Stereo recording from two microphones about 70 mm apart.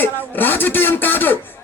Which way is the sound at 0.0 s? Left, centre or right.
Left.